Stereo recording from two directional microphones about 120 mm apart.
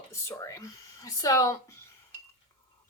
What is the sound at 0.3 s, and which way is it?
Speech, 25° left (ahead or behind).